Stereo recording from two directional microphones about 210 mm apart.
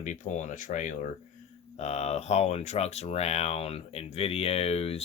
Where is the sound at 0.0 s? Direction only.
35° left (ahead or behind).